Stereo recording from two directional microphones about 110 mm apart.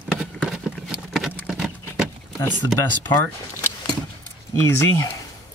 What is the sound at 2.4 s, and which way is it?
Speech, 20° left (ahead or behind).